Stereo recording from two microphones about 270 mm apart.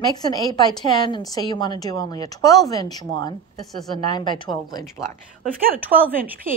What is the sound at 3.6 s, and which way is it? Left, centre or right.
Speech, centre.